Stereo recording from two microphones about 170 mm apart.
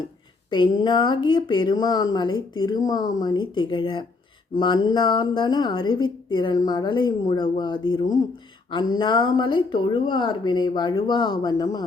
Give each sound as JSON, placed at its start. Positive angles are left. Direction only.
{"t": 0.5, "sound": "a woman's voice", "side_deg": 25}